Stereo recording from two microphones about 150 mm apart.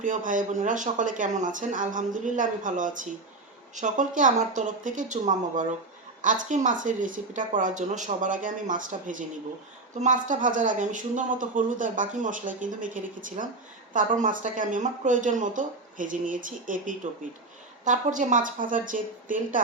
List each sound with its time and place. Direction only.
0.0 s speech: 60° right (ahead or behind)